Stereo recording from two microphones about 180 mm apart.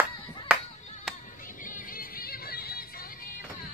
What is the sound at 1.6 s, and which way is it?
Music, 50° left (ahead or behind).